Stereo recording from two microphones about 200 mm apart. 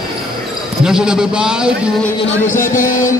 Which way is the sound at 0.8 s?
5° right (ahead or behind).